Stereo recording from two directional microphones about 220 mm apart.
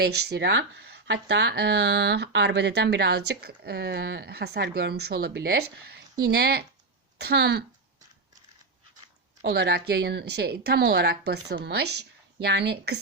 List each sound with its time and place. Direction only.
0.0 s speech: 45° right (ahead or behind)
9.4 s speech: 50° right (ahead or behind)